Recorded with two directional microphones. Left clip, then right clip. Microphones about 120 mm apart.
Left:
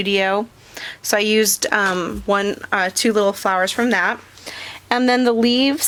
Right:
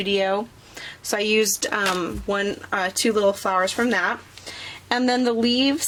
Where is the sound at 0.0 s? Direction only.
40° left (ahead or behind).